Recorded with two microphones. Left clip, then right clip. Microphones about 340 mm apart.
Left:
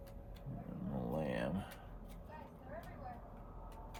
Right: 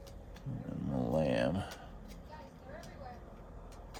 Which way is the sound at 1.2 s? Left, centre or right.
Right.